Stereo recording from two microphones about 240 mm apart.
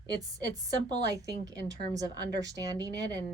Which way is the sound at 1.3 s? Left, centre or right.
Right.